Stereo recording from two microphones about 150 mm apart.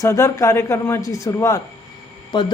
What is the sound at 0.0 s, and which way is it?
A woman's voice, 20° left (ahead or behind).